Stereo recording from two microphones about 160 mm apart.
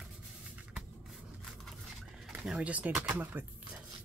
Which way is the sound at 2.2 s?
5° right (ahead or behind).